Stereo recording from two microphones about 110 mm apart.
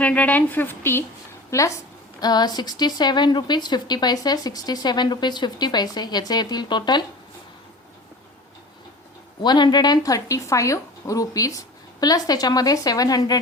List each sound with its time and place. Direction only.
0.0 s a woman's voice: 15° left (ahead or behind); by 1.8 s 30° left (ahead or behind)
2.2 s a woman's voice: 40° left (ahead or behind)
9.4 s a woman's voice: 40° left (ahead or behind)